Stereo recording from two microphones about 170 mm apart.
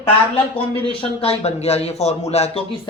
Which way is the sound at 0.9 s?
35° left (ahead or behind).